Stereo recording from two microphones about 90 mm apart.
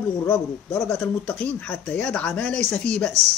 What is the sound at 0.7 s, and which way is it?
Speech, 25° left (ahead or behind).